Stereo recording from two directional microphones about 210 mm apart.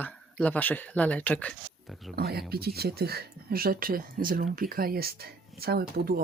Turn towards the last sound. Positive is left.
turn(degrees=-45)  # may be behind; listen again after turning